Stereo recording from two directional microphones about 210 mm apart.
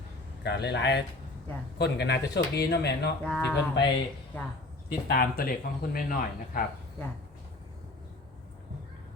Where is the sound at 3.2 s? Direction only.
5° left (ahead or behind).